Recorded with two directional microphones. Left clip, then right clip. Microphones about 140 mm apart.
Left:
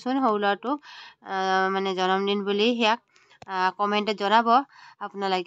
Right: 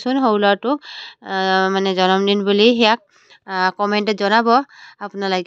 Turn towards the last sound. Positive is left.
turn(degrees=-30)  # may be behind; listen again after turning